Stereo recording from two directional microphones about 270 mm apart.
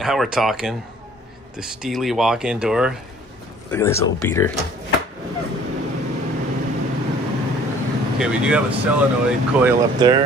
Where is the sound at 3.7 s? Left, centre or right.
Centre.